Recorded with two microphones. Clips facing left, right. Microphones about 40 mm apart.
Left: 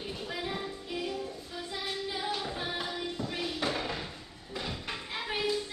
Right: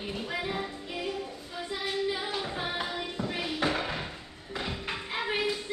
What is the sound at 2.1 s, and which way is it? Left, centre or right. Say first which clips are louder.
Music: right 1 dB; centre.